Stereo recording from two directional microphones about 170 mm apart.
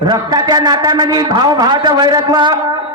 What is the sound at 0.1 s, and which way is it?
A man's voice, 25° right (ahead or behind).